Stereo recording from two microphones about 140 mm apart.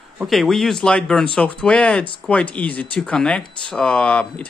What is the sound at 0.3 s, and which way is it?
Speech, centre (ahead or behind).